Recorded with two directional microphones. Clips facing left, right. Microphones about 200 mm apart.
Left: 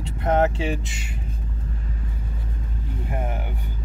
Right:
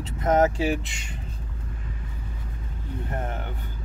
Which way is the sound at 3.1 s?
10° left (ahead or behind).